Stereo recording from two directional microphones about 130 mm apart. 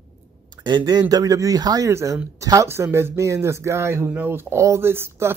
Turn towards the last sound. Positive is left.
turn(degrees=-20)  # may be behind; listen again after turning